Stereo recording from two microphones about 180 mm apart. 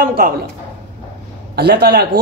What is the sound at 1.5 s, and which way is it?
Speech, 65° right (ahead or behind).